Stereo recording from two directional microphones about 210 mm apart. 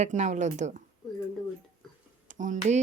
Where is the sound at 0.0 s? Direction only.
35° right (ahead or behind).